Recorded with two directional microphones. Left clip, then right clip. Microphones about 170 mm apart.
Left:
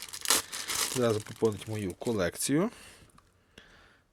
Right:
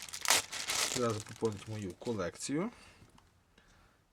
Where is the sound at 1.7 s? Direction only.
40° left (ahead or behind).